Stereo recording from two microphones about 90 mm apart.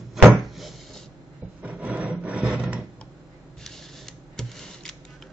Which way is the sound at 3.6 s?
5° left (ahead or behind).